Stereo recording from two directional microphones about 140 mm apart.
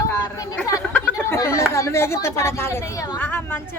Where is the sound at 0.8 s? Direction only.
10° left (ahead or behind).